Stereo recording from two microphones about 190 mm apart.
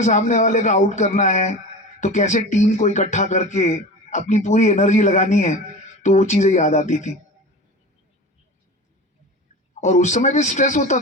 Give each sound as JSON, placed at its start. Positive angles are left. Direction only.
{"t": 0.0, "sound": "speech", "side_deg": 40}
{"t": 9.8, "sound": "speech", "side_deg": 40}